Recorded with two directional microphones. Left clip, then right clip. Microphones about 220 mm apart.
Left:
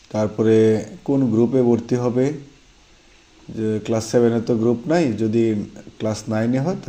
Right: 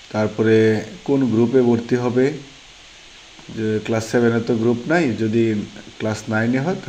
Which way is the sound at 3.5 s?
20° left (ahead or behind).